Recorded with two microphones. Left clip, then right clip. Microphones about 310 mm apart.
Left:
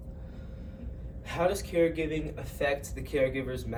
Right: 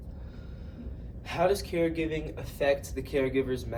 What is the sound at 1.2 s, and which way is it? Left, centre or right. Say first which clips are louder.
A man's voice: right 2 dB; centre.